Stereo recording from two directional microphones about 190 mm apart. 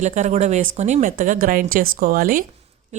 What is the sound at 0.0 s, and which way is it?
Speech, 40° right (ahead or behind).